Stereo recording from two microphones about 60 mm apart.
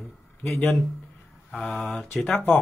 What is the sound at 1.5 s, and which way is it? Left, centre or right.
Speech, centre.